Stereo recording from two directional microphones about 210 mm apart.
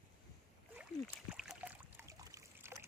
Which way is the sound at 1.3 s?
Centre (ahead or behind).